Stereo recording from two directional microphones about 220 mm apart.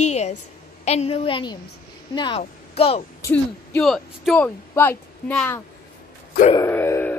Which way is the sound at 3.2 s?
10° left (ahead or behind).